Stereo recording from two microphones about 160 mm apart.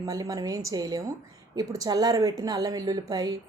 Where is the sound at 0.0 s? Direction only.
20° right (ahead or behind).